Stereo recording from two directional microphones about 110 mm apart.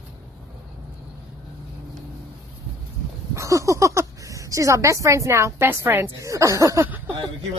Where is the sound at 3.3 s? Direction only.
30° right (ahead or behind).